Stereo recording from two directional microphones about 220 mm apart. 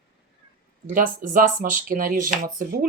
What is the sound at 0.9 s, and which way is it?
Speech, 35° right (ahead or behind).